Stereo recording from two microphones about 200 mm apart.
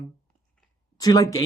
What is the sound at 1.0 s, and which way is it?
Speech, 20° left (ahead or behind).